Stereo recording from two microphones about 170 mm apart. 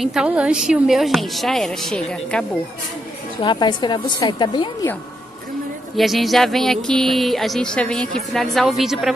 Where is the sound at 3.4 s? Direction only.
25° left (ahead or behind).